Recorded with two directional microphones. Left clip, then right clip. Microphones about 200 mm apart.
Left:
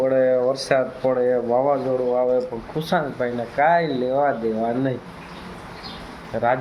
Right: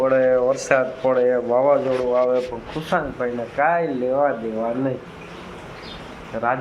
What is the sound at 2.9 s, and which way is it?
Speech, 20° left (ahead or behind).